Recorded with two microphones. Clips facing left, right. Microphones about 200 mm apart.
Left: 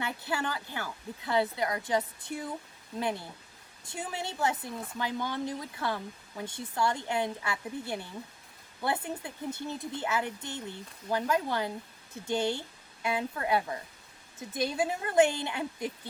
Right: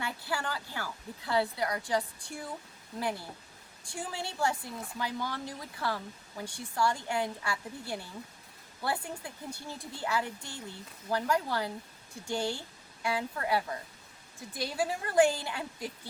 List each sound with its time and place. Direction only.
0.0 s a woman's voice: 20° left (ahead or behind)